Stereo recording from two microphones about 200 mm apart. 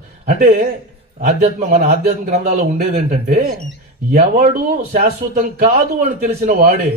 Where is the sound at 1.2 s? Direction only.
35° right (ahead or behind).